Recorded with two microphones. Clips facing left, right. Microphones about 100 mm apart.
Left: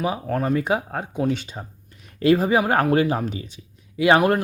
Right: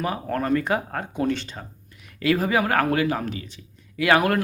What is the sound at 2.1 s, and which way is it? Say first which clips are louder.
Speech: left 4 dB; 25° left (ahead or behind).